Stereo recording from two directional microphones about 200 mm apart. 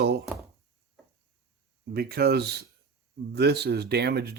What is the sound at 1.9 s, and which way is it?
Speech, 50° right (ahead or behind).